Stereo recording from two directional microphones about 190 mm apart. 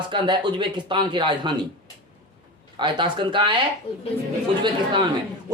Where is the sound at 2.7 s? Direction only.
25° right (ahead or behind).